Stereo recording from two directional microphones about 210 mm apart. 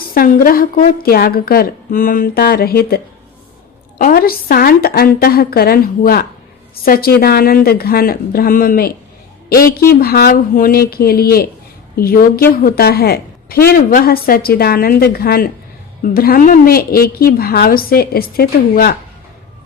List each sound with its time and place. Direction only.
0.1 s a woman's voice: 45° left (ahead or behind)